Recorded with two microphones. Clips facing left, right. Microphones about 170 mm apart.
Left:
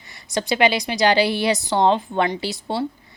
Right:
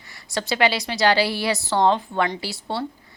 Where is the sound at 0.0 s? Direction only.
20° left (ahead or behind).